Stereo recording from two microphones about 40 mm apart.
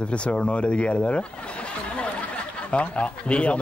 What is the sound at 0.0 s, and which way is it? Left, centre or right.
Speech, left.